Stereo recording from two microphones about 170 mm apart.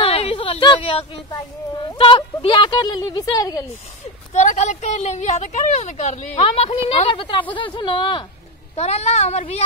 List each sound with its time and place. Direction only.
0.0 s a sound: 35° left (ahead or behind)
1.9 s speech: 30° left (ahead or behind)
4.3 s a woman's voice: 45° left (ahead or behind)
8.7 s a woman's voice: 40° left (ahead or behind)